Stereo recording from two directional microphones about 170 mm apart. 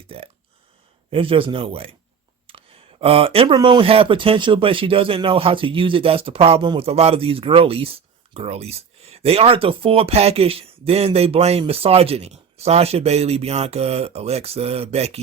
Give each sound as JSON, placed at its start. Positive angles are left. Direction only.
{"t": 0.1, "sound": "speech", "side_deg": -35}